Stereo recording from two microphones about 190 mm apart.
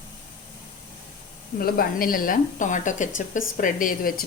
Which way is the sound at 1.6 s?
50° left (ahead or behind).